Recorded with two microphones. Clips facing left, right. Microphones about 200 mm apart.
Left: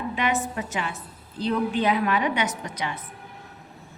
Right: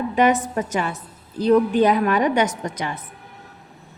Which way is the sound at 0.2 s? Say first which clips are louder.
Right 9 dB; 45° right (ahead or behind).